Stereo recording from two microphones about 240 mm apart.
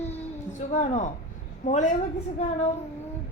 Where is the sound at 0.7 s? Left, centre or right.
Left.